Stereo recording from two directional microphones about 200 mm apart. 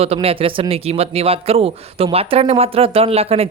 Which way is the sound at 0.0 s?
30° right (ahead or behind).